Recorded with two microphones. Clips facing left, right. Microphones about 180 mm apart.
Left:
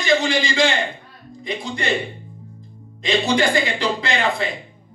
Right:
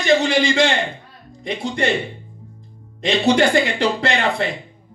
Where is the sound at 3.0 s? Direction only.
65° right (ahead or behind).